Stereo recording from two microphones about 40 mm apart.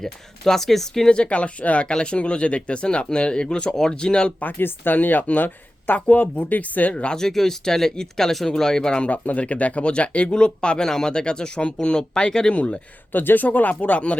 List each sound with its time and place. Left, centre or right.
0.0 s speech: centre
1.1 s speech: left
4.4 s speech: left
6.1 s speech: left
6.9 s speech: left
7.2 s speech: centre
9.0 s speech: left
13.1 s speech: left